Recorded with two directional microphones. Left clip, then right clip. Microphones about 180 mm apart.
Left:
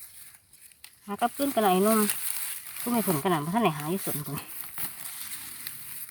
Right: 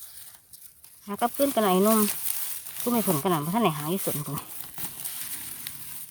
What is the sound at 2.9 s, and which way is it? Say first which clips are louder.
Speech: right 1 dB; 5° right (ahead or behind).